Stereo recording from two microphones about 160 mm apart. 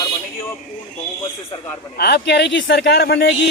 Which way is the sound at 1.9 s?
90° left.